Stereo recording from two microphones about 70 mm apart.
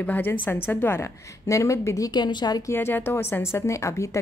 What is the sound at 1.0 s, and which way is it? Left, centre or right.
A woman's voice, left.